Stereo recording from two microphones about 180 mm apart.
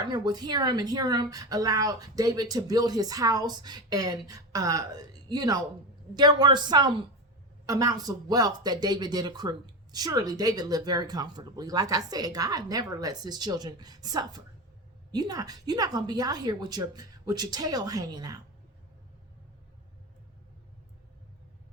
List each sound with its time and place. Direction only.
0.0 s speech: 25° right (ahead or behind)